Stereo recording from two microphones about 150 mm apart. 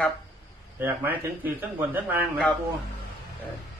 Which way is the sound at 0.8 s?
10° right (ahead or behind).